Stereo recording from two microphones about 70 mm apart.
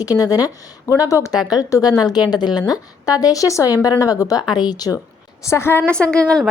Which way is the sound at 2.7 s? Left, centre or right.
Left.